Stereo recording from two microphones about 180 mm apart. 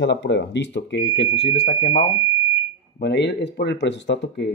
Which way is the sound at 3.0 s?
70° left (ahead or behind).